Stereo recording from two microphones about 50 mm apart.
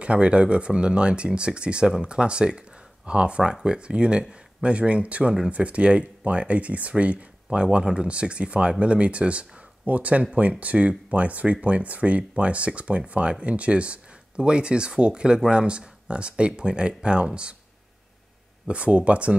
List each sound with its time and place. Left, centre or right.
0.0 s speech: right
18.7 s speech: right